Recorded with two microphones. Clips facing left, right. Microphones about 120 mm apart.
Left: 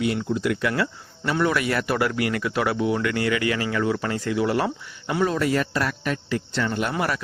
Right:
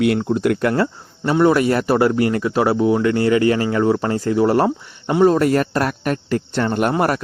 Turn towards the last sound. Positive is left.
turn(degrees=-45)  # may be behind; listen again after turning